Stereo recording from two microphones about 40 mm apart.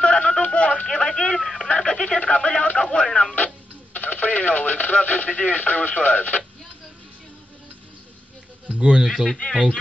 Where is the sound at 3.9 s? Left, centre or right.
Left.